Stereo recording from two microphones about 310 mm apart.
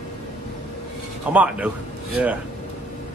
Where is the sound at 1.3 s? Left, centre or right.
Centre.